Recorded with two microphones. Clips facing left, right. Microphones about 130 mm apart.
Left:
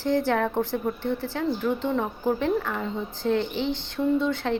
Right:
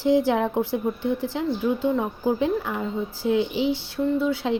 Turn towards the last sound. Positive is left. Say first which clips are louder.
# right 1 dB
turn(degrees=-10)  # may be behind; listen again after turning